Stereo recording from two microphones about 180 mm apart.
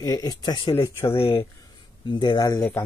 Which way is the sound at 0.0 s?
20° left (ahead or behind).